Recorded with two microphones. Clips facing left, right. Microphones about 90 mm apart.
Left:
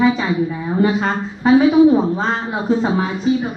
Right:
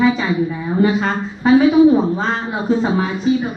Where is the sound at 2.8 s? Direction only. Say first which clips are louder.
Even; 40° left (ahead or behind).